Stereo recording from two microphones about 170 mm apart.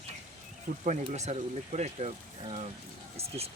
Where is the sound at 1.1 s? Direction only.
40° right (ahead or behind).